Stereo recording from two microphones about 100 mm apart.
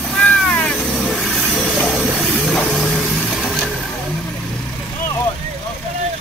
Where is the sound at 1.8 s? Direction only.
5° left (ahead or behind).